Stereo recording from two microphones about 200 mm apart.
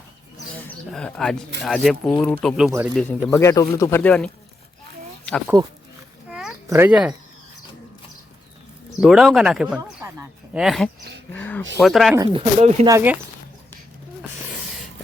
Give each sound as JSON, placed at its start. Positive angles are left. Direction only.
{"t": 0.9, "sound": "speech", "side_deg": 5}
{"t": 5.5, "sound": "speech", "side_deg": -20}
{"t": 6.3, "sound": "a sound", "side_deg": -5}
{"t": 9.0, "sound": "speech", "side_deg": 0}
{"t": 10.0, "sound": "a sound", "side_deg": -15}
{"t": 10.6, "sound": "speech", "side_deg": 0}
{"t": 11.3, "sound": "a sound", "side_deg": 5}
{"t": 11.8, "sound": "speech", "side_deg": 0}
{"t": 12.1, "sound": "speech", "side_deg": -20}
{"t": 12.9, "sound": "speech", "side_deg": -10}